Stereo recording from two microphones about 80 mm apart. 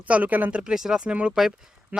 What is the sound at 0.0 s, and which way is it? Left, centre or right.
Speech, centre.